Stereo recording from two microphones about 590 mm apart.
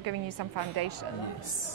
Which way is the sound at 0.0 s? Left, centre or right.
Right.